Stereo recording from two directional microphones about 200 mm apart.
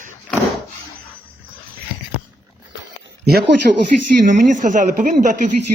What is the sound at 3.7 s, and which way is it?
Speech, 45° right (ahead or behind).